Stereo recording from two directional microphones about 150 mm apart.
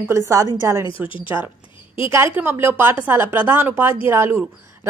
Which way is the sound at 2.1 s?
15° right (ahead or behind).